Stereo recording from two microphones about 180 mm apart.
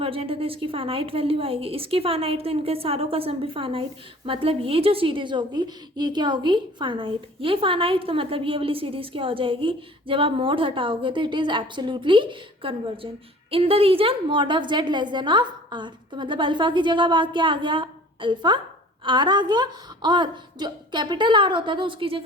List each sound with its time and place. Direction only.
0.0 s a woman's voice: 30° right (ahead or behind)